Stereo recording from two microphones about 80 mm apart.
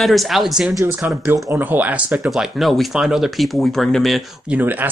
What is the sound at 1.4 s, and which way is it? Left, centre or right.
Speech, right.